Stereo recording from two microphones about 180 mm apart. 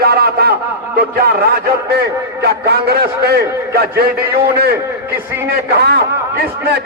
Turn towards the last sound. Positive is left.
turn(degrees=-60)  # may be behind; listen again after turning